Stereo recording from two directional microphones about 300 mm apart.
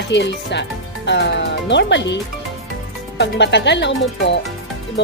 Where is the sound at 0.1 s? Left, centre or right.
Left.